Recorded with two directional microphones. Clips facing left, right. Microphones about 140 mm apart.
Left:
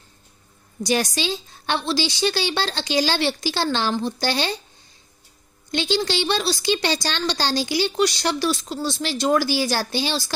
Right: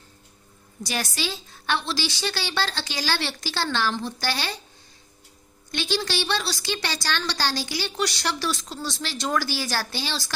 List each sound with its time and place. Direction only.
0.8 s a woman's voice: 20° left (ahead or behind)
5.7 s a woman's voice: 20° left (ahead or behind)